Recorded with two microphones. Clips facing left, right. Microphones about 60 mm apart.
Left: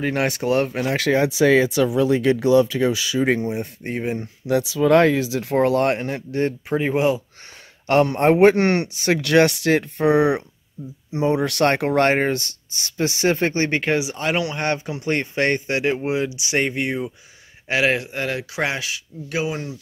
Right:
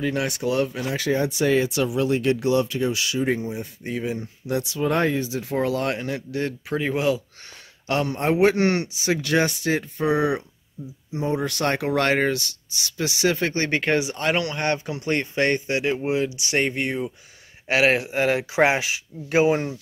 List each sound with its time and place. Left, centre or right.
0.0 s speech: left
2.7 s speech: left
3.3 s speech: left
3.8 s speech: left
4.5 s speech: left
5.5 s speech: left
6.7 s speech: left
7.8 s speech: left
11.1 s speech: left
11.9 s speech: left
13.7 s speech: centre; by 15.9 s left
15.9 s speech: centre
17.6 s speech: centre; by 19.8 s right